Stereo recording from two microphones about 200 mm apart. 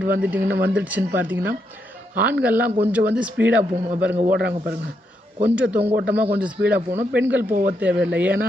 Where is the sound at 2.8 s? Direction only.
10° right (ahead or behind).